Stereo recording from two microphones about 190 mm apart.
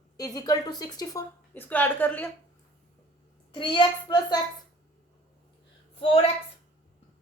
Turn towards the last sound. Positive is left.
turn(degrees=30)  # may be behind; listen again after turning